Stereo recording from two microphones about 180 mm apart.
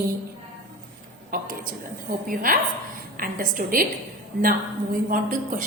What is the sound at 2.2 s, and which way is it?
A woman's voice, 50° right (ahead or behind).